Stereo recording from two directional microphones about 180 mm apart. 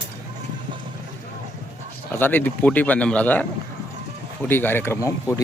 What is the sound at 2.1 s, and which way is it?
Speech, 10° left (ahead or behind).